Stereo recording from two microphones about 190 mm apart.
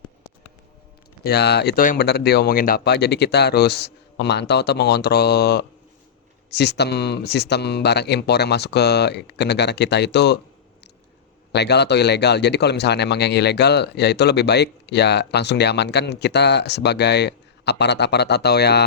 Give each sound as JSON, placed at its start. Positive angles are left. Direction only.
{"t": 1.2, "sound": "speech", "side_deg": 60}
{"t": 11.5, "sound": "speech", "side_deg": 60}